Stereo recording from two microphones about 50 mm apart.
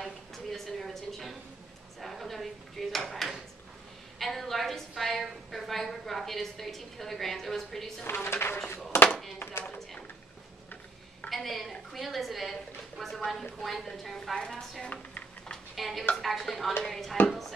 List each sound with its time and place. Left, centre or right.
0.0 s a sound: centre
2.0 s a woman's voice: centre
8.0 s speech: left
8.9 s a sound: left
9.4 s speech: left
11.2 s a woman's voice: centre
14.9 s typing: left
15.7 s a woman's voice: centre